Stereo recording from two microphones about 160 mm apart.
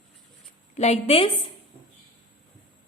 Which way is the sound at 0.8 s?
40° left (ahead or behind).